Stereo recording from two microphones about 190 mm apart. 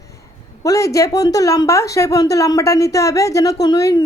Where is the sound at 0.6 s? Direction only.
20° left (ahead or behind).